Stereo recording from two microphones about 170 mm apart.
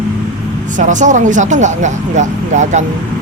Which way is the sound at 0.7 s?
45° right (ahead or behind).